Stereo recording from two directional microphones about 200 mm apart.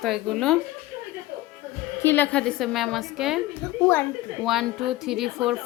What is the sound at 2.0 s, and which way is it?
A woman's voice, 10° left (ahead or behind).